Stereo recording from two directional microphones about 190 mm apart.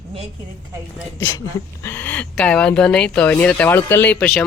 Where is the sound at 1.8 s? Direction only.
10° left (ahead or behind).